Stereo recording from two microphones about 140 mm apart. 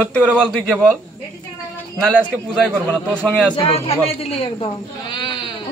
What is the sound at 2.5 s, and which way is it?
Speech, 5° left (ahead or behind).